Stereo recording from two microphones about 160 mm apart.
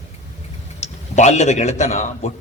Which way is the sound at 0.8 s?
45° left (ahead or behind).